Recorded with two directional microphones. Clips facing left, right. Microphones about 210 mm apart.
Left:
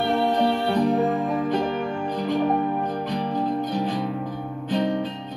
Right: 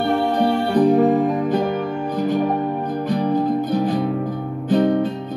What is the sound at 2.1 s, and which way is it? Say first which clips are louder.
Music: right 3 dB; 45° right (ahead or behind).